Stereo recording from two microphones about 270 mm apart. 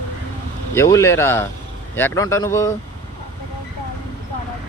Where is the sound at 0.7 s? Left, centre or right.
Centre.